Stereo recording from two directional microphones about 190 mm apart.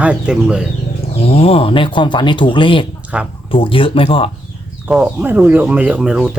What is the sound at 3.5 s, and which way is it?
Speech, 30° left (ahead or behind).